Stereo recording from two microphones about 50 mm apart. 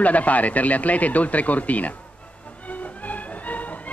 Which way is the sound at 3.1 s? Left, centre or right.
Left.